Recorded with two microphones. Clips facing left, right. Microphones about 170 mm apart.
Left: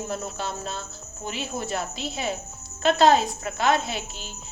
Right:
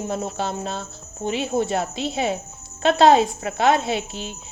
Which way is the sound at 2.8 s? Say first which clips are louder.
Right 4 dB; 25° right (ahead or behind).